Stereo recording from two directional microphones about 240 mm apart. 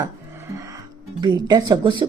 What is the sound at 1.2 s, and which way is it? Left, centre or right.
Speech, centre.